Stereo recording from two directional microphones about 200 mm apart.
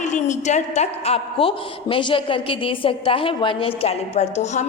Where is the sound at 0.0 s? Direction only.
35° left (ahead or behind).